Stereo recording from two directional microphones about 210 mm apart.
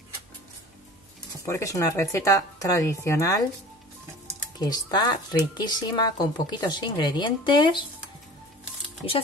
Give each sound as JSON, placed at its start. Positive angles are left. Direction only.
{"t": 1.4, "sound": "speech", "side_deg": 15}
{"t": 4.6, "sound": "speech", "side_deg": 20}